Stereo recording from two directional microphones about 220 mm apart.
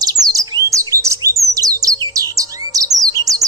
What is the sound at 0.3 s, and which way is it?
Chirp, 15° right (ahead or behind).